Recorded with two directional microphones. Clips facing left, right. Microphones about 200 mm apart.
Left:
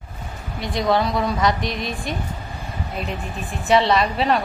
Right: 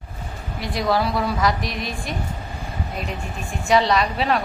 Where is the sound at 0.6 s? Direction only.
Centre (ahead or behind).